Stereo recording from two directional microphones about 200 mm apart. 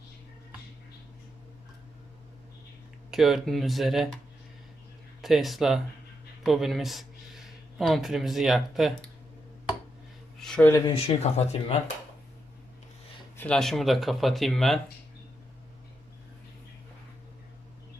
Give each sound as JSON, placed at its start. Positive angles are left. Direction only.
{"t": 3.1, "sound": "speech", "side_deg": 0}
{"t": 5.2, "sound": "speech", "side_deg": 0}
{"t": 10.4, "sound": "speech", "side_deg": 5}
{"t": 10.9, "sound": "speech", "side_deg": 30}
{"t": 13.3, "sound": "speech", "side_deg": 5}